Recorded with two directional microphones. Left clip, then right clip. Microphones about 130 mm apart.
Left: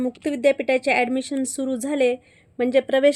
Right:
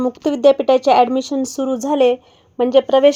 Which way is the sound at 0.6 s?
50° left (ahead or behind).